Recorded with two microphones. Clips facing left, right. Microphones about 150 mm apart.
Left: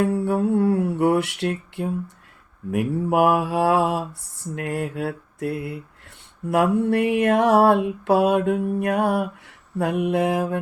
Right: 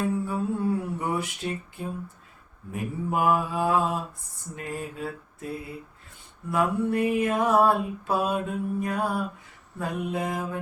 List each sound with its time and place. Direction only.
0.0 s mantra: 70° left (ahead or behind)